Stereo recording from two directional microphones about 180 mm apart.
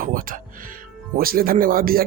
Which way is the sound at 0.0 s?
50° right (ahead or behind).